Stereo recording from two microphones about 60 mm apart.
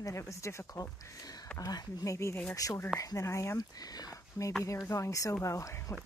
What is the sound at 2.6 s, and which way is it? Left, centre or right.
Speech, left.